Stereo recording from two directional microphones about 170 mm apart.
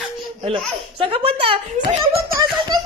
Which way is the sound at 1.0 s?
30° right (ahead or behind).